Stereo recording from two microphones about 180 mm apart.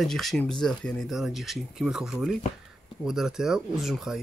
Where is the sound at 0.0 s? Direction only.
Centre (ahead or behind).